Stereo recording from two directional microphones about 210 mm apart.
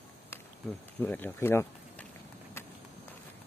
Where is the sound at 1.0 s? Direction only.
10° left (ahead or behind).